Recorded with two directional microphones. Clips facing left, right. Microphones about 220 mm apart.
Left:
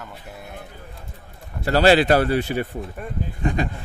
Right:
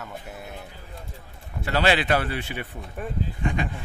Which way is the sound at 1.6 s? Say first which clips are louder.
Left 7 dB; 40° left (ahead or behind).